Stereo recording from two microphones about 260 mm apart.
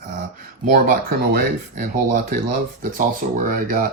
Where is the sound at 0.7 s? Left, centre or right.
Right.